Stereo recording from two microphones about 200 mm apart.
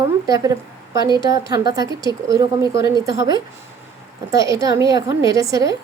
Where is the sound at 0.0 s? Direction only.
15° right (ahead or behind).